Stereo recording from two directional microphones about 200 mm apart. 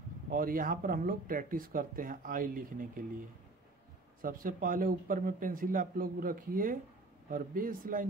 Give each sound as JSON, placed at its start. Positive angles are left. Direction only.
{"t": 0.3, "sound": "speech", "side_deg": -45}